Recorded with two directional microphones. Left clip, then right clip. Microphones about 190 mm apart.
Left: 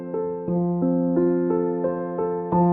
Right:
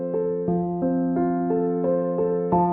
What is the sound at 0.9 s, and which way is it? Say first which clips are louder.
Music: left 1 dB; 45° right (ahead or behind).